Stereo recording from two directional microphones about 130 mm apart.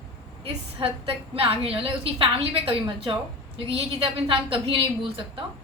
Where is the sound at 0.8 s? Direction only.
40° right (ahead or behind).